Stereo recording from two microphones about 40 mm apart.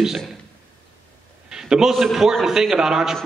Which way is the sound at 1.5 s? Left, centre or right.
Centre.